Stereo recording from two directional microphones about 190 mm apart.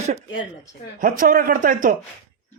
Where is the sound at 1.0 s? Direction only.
50° right (ahead or behind).